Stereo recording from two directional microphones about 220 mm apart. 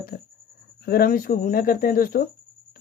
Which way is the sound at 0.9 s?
40° left (ahead or behind).